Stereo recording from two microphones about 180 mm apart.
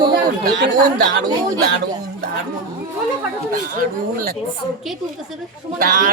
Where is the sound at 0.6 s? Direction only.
65° right (ahead or behind).